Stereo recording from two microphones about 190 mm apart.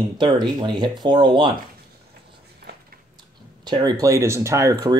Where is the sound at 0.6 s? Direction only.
25° right (ahead or behind).